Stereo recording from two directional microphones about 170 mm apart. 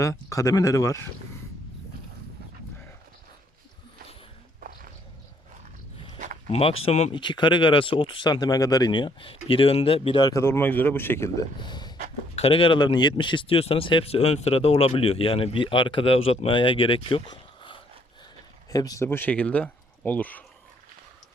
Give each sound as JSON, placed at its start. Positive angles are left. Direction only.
{"t": 0.0, "sound": "speech", "side_deg": 20}
{"t": 6.5, "sound": "speech", "side_deg": 35}
{"t": 11.6, "sound": "a sound", "side_deg": 25}
{"t": 12.4, "sound": "speech", "side_deg": 30}